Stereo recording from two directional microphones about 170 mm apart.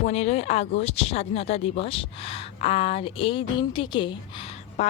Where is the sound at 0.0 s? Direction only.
40° left (ahead or behind).